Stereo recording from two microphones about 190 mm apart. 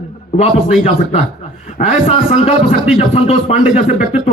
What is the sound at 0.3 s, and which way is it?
A man's voice, 35° left (ahead or behind).